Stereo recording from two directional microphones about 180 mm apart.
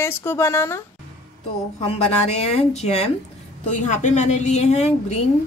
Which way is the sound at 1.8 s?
35° left (ahead or behind).